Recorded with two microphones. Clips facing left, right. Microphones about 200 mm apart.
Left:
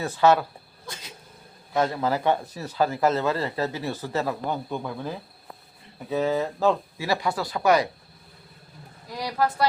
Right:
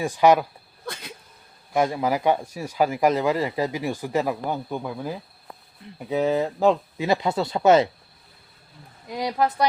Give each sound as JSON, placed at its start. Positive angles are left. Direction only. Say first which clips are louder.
{"t": 0.0, "sound": "speech", "louder": "right 2 dB", "side_deg": -15}
{"t": 0.9, "sound": "a sound", "louder": "right 6 dB", "side_deg": -60}
{"t": 1.7, "sound": "speech", "louder": "right 2 dB", "side_deg": -10}
{"t": 9.0, "sound": "speech", "louder": "right 2 dB", "side_deg": -20}